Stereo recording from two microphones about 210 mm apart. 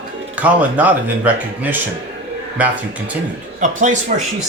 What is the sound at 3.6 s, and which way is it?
Speech, 35° right (ahead or behind).